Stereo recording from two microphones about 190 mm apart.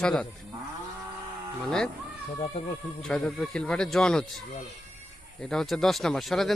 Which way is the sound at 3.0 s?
5° left (ahead or behind).